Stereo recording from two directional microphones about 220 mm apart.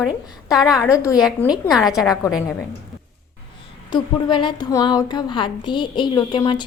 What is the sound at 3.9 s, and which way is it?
A woman's voice, 20° left (ahead or behind).